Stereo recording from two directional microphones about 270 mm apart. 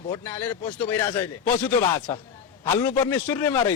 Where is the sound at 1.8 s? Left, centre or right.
Left.